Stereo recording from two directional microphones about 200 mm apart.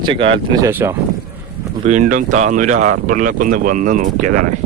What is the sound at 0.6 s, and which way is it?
Speech, 10° right (ahead or behind).